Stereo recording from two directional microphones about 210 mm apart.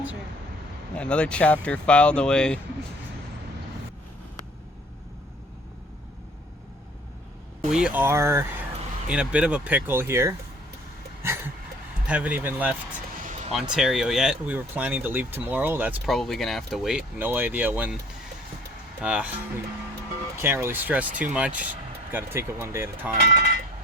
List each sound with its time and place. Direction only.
0.9 s speech: 5° left (ahead or behind)
7.7 s speech: 5° right (ahead or behind)
12.0 s speech: 5° right (ahead or behind)
19.0 s speech: 5° right (ahead or behind)